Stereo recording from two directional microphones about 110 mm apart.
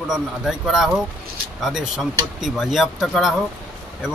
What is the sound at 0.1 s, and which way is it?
Speech, 5° right (ahead or behind).